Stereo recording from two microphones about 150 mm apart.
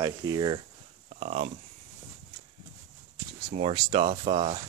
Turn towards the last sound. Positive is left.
turn(degrees=-40)  # may be behind; listen again after turning